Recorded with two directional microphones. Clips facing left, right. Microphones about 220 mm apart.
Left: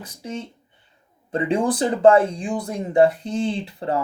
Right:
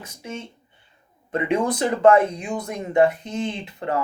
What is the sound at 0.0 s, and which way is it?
Speech, 35° left (ahead or behind).